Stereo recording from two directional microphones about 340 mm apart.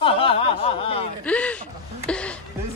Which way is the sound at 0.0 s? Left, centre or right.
Centre.